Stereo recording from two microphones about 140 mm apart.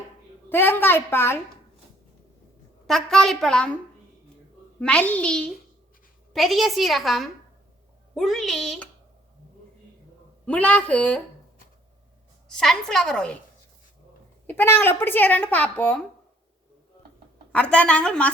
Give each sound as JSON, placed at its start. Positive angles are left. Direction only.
{"t": 0.5, "sound": "speech", "side_deg": 15}
{"t": 2.8, "sound": "a woman's voice", "side_deg": 5}
{"t": 4.8, "sound": "a woman's voice", "side_deg": 10}
{"t": 10.4, "sound": "speech", "side_deg": 10}
{"t": 12.5, "sound": "a woman's voice", "side_deg": 5}
{"t": 14.4, "sound": "speech", "side_deg": 15}
{"t": 17.5, "sound": "speech", "side_deg": 10}